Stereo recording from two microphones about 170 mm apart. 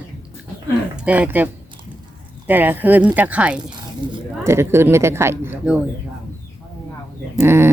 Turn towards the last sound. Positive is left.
turn(degrees=-15)  # may be behind; listen again after turning